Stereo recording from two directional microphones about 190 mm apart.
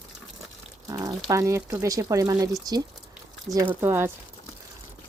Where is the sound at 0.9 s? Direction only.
20° right (ahead or behind).